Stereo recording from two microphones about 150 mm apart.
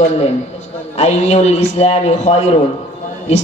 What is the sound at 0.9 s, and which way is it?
A man's voice, 45° left (ahead or behind).